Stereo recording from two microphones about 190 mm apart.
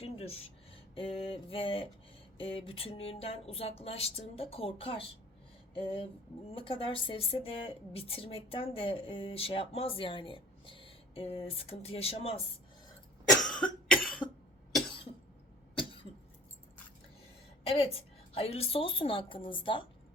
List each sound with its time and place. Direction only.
0.0 s a sound: 35° left (ahead or behind)
0.9 s a woman's voice: 30° left (ahead or behind)
2.4 s a sound: 30° left (ahead or behind)
5.7 s a woman's voice: 30° left (ahead or behind)
13.4 s cough: 5° left (ahead or behind)
17.7 s a woman's voice: 30° left (ahead or behind)